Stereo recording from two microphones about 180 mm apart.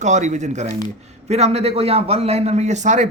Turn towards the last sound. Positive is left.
turn(degrees=-40)  # may be behind; listen again after turning